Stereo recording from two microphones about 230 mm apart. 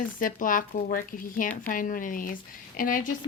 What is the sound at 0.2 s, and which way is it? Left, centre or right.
Speech, left.